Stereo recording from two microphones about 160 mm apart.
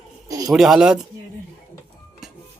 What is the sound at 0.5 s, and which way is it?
Speech, centre (ahead or behind).